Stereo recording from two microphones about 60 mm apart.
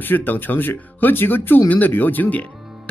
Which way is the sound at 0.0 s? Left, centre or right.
Left.